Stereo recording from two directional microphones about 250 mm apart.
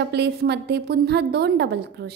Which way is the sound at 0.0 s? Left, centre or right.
Right.